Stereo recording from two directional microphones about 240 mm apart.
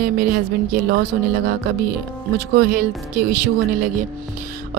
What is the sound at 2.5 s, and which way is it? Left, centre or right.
A woman's voice, right.